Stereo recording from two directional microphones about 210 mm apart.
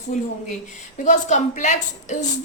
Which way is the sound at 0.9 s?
35° left (ahead or behind).